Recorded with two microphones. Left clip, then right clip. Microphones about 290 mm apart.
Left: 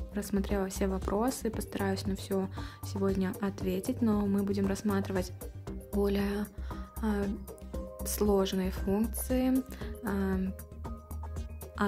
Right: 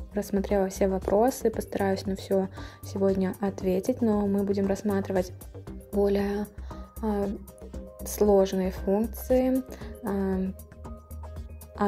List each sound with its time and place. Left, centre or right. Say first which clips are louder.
0.1 s speech: right 7 dB; centre
5.7 s music: right 6 dB; centre
6.1 s speech: right 6 dB; centre
8.2 s speech: right 7 dB; centre